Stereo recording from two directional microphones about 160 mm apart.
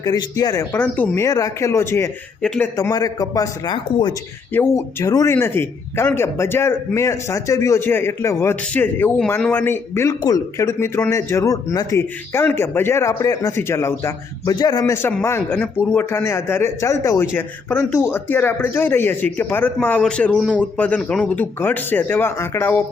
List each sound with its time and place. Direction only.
0.0 s speech: 25° left (ahead or behind)